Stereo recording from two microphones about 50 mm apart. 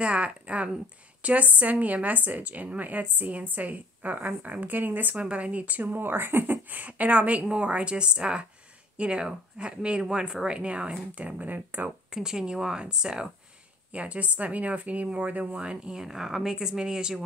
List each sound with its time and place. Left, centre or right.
0.0 s a woman's voice: right
12.1 s speech: centre
13.9 s speech: right
15.6 s speech: centre